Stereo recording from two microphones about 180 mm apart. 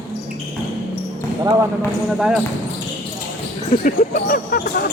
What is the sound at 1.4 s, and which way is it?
Speech, 20° right (ahead or behind).